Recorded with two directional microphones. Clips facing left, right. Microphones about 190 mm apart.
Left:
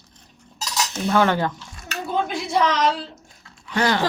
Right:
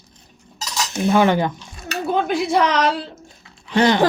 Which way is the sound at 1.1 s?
15° right (ahead or behind).